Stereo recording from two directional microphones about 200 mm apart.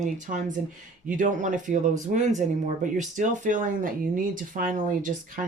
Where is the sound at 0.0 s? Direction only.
40° right (ahead or behind).